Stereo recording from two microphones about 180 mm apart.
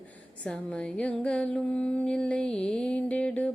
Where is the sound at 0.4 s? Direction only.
5° left (ahead or behind).